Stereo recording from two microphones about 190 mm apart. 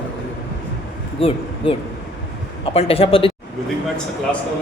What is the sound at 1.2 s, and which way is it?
Speech, 30° left (ahead or behind).